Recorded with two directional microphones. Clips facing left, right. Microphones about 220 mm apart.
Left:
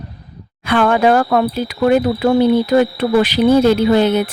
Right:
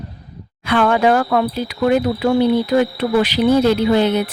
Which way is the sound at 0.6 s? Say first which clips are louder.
Left 2 dB; 50° left (ahead or behind).